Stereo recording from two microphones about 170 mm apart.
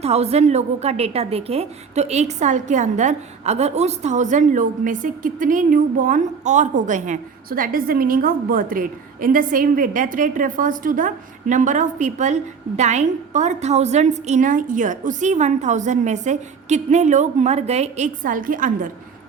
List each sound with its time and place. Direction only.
0.0 s a woman's voice: 40° right (ahead or behind)